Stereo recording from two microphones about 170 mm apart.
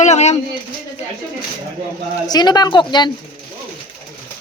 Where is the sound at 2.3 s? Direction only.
25° left (ahead or behind).